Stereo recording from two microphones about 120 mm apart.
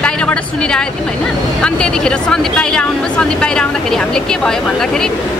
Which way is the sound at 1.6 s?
5° left (ahead or behind).